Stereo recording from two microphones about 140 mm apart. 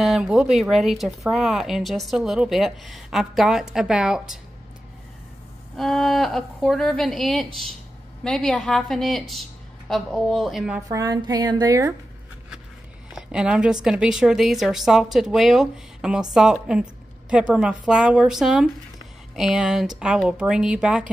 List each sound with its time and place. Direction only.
0.0 s speech: centre (ahead or behind)
5.8 s speech: centre (ahead or behind)
10.9 s music: 25° right (ahead or behind)
13.1 s a woman's voice: 5° right (ahead or behind)